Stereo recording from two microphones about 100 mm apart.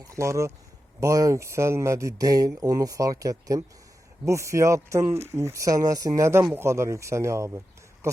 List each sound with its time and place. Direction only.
0.0 s speech: 30° right (ahead or behind)